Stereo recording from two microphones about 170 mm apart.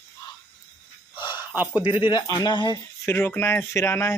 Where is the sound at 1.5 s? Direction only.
10° right (ahead or behind).